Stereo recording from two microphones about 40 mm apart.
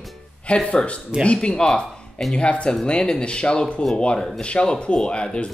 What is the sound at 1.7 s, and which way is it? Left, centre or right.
Music, centre.